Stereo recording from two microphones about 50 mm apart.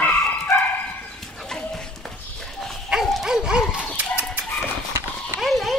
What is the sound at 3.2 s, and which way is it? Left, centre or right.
Dog, centre.